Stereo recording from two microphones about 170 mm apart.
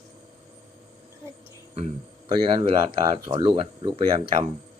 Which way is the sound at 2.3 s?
30° right (ahead or behind).